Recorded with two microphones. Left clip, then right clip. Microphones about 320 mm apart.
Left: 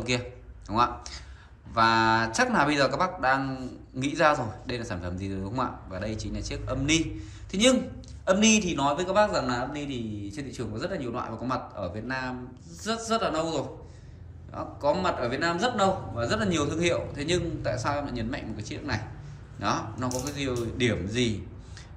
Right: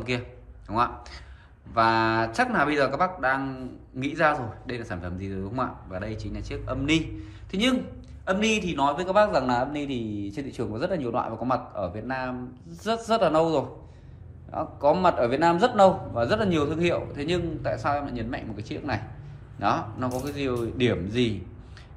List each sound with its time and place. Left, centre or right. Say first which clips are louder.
0.1 s a man's voice: left 1 dB; centre